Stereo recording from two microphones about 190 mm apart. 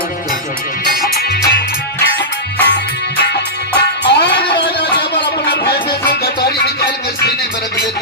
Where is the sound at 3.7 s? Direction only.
65° left (ahead or behind).